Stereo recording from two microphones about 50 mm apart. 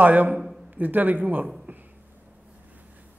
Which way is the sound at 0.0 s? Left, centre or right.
Right.